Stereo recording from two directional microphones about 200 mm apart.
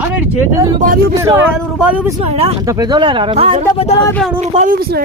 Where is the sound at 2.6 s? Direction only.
20° right (ahead or behind); by 4.7 s 35° right (ahead or behind).